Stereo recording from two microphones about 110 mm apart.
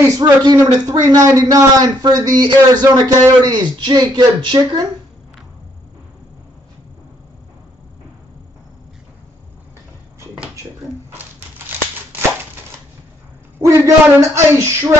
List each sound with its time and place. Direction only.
0.2 s a man's voice: 40° right (ahead or behind)
13.6 s speech: 30° right (ahead or behind)